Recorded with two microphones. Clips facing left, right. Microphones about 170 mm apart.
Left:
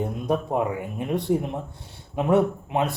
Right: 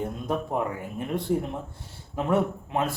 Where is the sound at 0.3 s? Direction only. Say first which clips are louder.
Left 4 dB; 20° left (ahead or behind).